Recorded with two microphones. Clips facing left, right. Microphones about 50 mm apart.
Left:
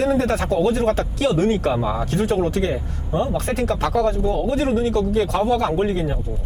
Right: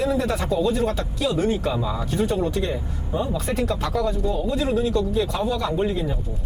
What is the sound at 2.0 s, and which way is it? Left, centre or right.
Speech, left.